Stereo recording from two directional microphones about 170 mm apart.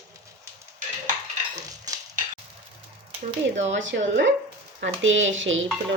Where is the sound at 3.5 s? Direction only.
90° right.